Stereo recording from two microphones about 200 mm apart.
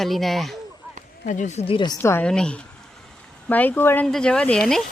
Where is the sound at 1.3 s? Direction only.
35° left (ahead or behind).